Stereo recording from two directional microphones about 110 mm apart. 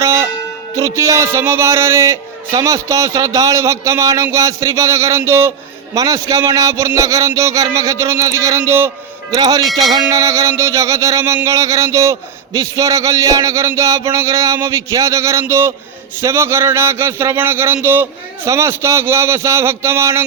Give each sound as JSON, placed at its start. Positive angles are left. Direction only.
{"t": 0.0, "sound": "music", "side_deg": -25}
{"t": 0.8, "sound": "a man's voice", "side_deg": -30}